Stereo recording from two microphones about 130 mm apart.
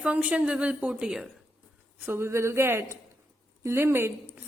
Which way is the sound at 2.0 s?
20° right (ahead or behind).